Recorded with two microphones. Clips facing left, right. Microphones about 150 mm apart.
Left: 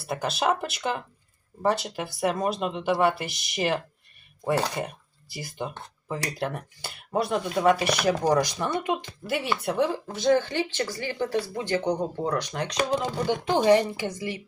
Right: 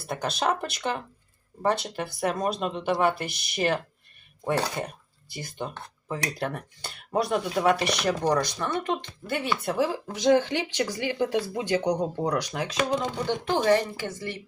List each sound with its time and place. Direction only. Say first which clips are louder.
0.1 s speech: left 1 dB; centre (ahead or behind)
10.2 s speech: right 1 dB; 15° right (ahead or behind); by 13.3 s 5° left (ahead or behind)
13.5 s a woman's voice: left 3 dB; 15° left (ahead or behind)